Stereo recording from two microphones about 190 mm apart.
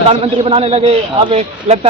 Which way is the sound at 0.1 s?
30° right (ahead or behind).